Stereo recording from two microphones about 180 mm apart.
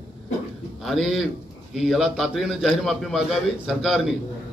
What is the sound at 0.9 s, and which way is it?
A man's voice, centre (ahead or behind).